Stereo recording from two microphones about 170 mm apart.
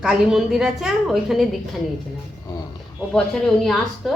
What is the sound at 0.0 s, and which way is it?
A woman's voice, 5° right (ahead or behind).